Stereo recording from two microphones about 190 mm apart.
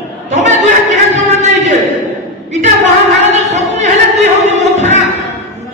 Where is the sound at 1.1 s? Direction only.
35° right (ahead or behind).